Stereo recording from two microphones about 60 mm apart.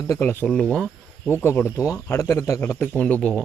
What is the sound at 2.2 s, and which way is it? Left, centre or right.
Speech, left.